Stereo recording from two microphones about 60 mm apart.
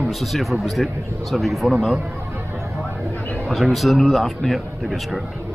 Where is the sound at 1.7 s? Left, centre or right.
Centre.